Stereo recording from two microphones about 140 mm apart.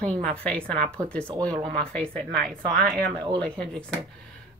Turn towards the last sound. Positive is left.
turn(degrees=5)  # may be behind; listen again after turning